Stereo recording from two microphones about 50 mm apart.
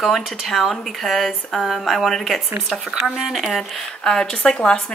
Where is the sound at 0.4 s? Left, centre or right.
Centre.